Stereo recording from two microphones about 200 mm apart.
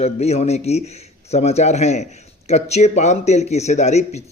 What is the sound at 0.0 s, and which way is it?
A man's voice, 35° left (ahead or behind).